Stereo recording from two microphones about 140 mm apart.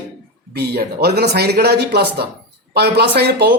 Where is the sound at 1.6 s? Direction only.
90° right.